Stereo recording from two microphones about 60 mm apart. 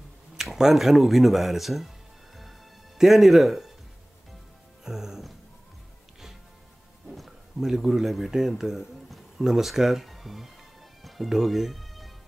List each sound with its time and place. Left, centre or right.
0.4 s speech: centre
3.0 s speech: centre
4.8 s music: centre
7.1 s speech: centre
11.0 s music: centre